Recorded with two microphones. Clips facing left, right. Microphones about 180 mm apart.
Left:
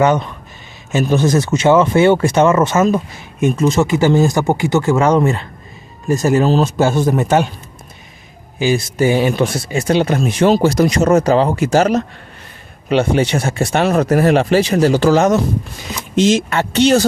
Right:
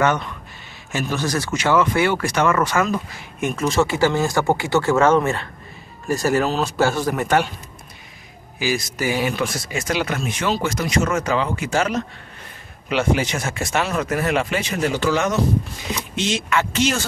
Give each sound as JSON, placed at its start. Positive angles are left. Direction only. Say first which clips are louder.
{"t": 0.9, "sound": "speech", "louder": "left 9 dB", "side_deg": 25}
{"t": 6.4, "sound": "speech", "louder": "left 8 dB", "side_deg": 30}
{"t": 6.8, "sound": "speech", "louder": "left 5 dB", "side_deg": 20}
{"t": 8.5, "sound": "speech", "louder": "left 8 dB", "side_deg": 25}